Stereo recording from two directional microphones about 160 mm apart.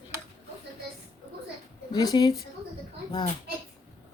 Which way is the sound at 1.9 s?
25° left (ahead or behind).